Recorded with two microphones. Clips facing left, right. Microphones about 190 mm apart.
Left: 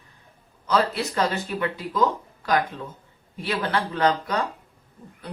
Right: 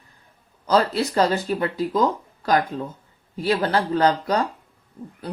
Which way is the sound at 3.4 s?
35° right (ahead or behind).